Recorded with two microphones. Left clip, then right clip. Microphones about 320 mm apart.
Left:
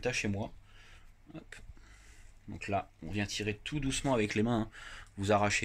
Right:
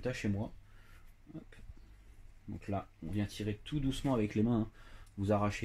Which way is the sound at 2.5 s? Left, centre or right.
Left.